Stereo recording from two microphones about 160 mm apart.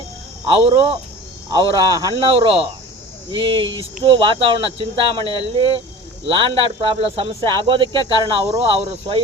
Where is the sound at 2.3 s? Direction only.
35° right (ahead or behind).